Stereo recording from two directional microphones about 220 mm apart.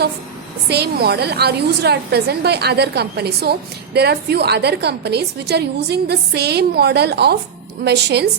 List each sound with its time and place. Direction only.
0.7 s a woman's voice: 45° right (ahead or behind)